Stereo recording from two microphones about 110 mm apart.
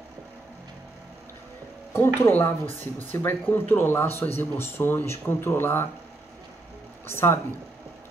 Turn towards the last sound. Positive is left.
turn(degrees=20)  # may be behind; listen again after turning